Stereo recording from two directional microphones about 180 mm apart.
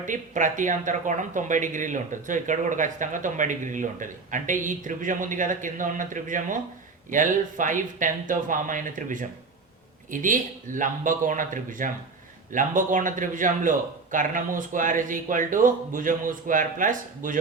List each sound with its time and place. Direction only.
0.0 s speech: 45° right (ahead or behind)